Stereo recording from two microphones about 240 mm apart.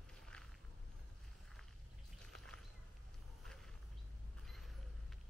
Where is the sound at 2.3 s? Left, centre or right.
Centre.